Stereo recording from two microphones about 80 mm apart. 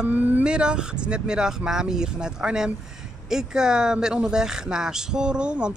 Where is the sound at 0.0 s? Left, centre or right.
Right.